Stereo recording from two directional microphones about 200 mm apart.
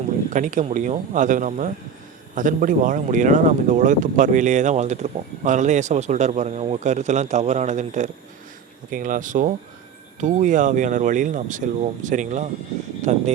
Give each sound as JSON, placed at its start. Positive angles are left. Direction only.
{"t": 0.3, "sound": "speech", "side_deg": -40}